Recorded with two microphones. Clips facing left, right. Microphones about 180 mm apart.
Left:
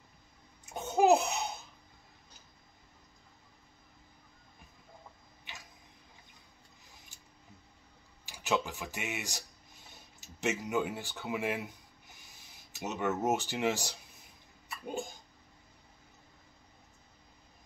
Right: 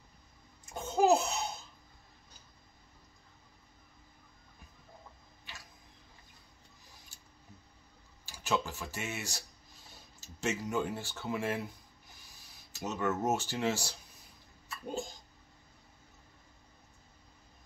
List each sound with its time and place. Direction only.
0.7 s babbling: 15° left (ahead or behind)
8.3 s speech: 15° left (ahead or behind)
12.7 s speech: 20° left (ahead or behind)